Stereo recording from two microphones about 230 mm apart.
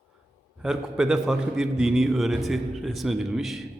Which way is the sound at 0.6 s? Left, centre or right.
Centre.